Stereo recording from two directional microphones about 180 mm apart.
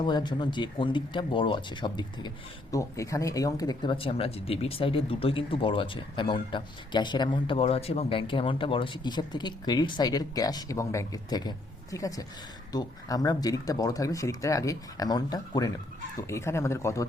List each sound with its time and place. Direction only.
0.0 s speech: 25° left (ahead or behind)